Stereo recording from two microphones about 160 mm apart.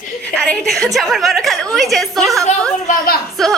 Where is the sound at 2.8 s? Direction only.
55° left (ahead or behind).